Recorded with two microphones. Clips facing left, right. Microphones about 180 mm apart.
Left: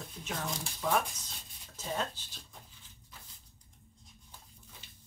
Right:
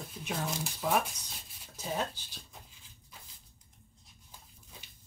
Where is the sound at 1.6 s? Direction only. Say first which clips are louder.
Right 1 dB; 10° right (ahead or behind).